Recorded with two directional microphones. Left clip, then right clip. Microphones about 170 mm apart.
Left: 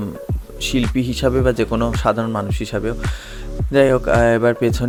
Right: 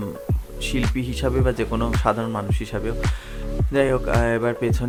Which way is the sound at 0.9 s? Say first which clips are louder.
Left 6 dB; 30° left (ahead or behind).